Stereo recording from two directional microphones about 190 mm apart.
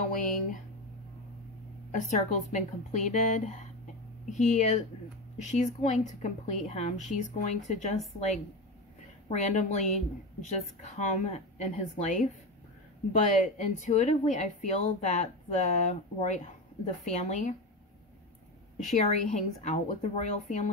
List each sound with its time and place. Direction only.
0.1 s speech: 45° left (ahead or behind)
1.9 s a woman's voice: 40° left (ahead or behind)
9.3 s a woman's voice: 40° left (ahead or behind)
13.3 s a woman's voice: 40° left (ahead or behind)
18.8 s a woman's voice: 40° left (ahead or behind)